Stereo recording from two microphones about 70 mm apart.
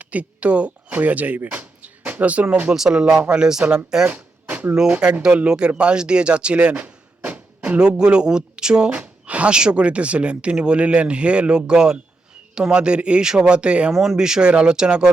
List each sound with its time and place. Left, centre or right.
0.0 s speech: right
2.7 s speech: centre
4.0 s a sound: centre
4.7 s speech: centre